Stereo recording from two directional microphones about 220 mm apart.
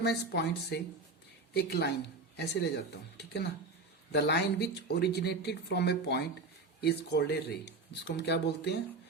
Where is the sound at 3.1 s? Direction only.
50° left (ahead or behind).